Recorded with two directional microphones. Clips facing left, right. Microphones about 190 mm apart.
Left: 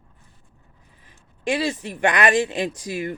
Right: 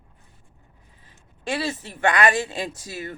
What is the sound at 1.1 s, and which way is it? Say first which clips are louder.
Speech: left 5 dB; 15° left (ahead or behind).